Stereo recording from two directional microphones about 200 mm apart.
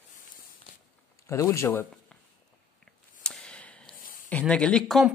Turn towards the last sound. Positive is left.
turn(degrees=0)  # may be behind; listen again after turning